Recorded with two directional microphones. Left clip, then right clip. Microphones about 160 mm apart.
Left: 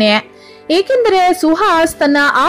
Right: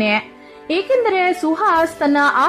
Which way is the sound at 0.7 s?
30° left (ahead or behind).